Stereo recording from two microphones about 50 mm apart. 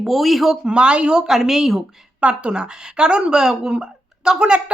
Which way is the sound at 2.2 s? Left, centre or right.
Centre.